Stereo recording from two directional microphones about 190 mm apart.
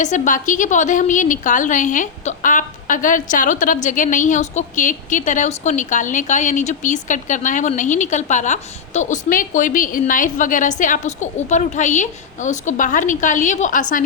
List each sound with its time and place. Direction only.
0.0 s a woman's voice: 40° left (ahead or behind)